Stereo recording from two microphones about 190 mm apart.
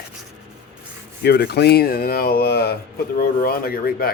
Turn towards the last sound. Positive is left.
turn(degrees=50)  # may be behind; listen again after turning